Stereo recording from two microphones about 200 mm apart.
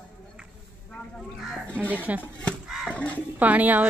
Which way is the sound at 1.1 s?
Centre (ahead or behind).